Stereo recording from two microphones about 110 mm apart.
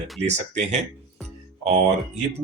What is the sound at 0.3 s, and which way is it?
Speech, 90° right.